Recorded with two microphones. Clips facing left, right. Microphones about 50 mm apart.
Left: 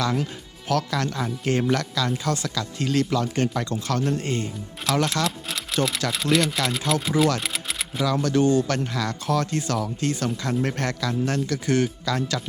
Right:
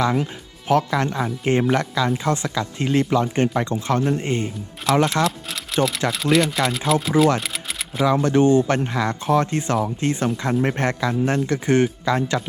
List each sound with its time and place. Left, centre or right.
0.0 s speech: right
4.9 s speech: centre
7.3 s a sound: centre
8.0 s speech: right